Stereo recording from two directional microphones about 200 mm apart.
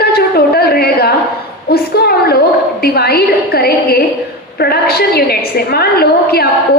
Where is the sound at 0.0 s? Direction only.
50° left (ahead or behind).